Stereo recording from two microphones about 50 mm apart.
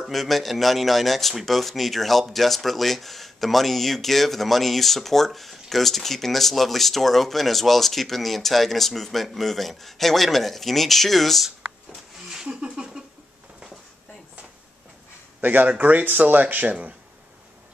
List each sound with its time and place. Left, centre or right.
0.1 s speech: centre
12.4 s a sound: right
15.4 s speech: right